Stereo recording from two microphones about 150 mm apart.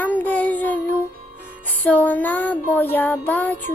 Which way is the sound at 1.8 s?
10° left (ahead or behind).